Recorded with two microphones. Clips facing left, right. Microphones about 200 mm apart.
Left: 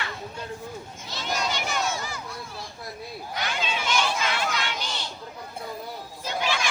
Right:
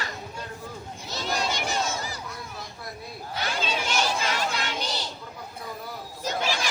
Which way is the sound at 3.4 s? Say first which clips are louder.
Right 1 dB; 40° right (ahead or behind).